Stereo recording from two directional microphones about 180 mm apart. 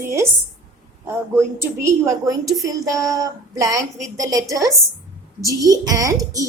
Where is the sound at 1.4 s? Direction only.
15° right (ahead or behind).